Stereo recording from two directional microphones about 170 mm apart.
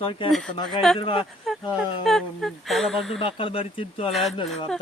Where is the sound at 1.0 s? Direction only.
30° left (ahead or behind).